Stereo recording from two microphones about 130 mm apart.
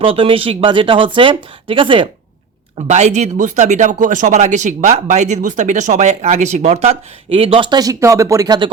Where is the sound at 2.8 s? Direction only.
65° right (ahead or behind); by 8.5 s 25° right (ahead or behind).